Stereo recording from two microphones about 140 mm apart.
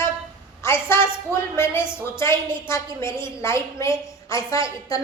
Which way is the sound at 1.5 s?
15° left (ahead or behind).